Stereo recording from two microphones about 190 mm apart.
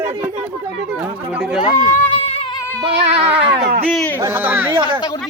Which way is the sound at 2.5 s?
10° left (ahead or behind).